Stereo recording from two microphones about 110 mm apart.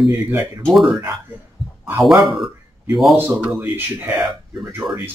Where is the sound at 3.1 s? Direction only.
20° right (ahead or behind).